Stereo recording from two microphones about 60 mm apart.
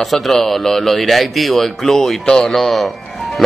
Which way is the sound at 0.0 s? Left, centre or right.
Centre.